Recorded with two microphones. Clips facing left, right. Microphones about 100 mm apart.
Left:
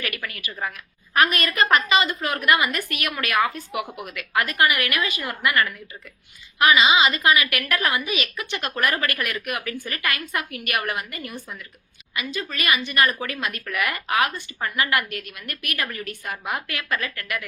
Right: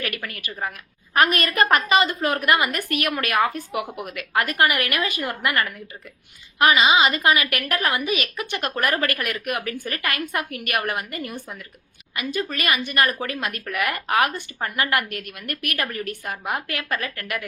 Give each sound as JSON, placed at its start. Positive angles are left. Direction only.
{"t": 0.0, "sound": "a woman's voice", "side_deg": -40}